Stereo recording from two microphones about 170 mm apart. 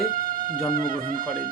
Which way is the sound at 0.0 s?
55° right (ahead or behind).